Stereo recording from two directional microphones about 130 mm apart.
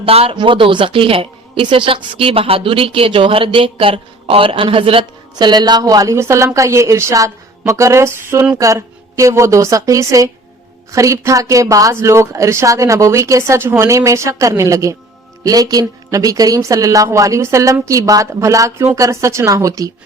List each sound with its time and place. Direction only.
0.0 s speech: 45° right (ahead or behind); by 19.9 s 25° right (ahead or behind)